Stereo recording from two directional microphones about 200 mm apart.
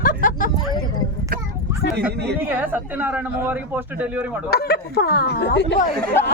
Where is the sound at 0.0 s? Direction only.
40° left (ahead or behind).